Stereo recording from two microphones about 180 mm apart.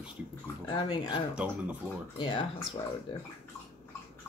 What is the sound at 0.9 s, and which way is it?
Speech, 25° left (ahead or behind).